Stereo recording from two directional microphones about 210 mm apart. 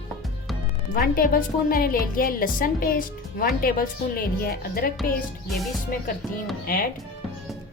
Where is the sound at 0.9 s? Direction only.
45° left (ahead or behind).